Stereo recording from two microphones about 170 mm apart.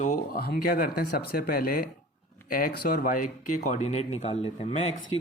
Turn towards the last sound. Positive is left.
turn(degrees=35)  # may be behind; listen again after turning